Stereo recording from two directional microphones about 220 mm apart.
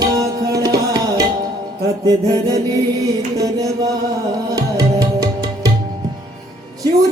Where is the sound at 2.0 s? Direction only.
15° right (ahead or behind).